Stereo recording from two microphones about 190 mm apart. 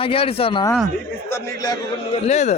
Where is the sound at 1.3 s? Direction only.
20° left (ahead or behind).